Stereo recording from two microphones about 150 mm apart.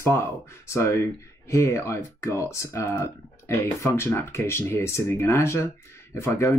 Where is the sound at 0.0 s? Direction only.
15° left (ahead or behind).